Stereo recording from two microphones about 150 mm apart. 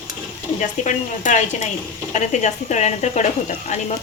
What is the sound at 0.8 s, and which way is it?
A woman's voice, 55° left (ahead or behind).